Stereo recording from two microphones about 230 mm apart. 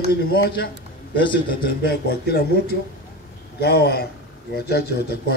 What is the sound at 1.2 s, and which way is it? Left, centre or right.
Speech, left.